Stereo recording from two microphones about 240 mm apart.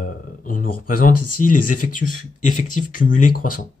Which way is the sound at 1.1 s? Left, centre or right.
Left.